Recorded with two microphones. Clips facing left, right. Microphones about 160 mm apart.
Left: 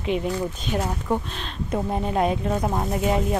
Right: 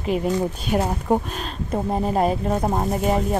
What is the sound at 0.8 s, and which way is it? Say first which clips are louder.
Speech: right 4 dB; 40° right (ahead or behind).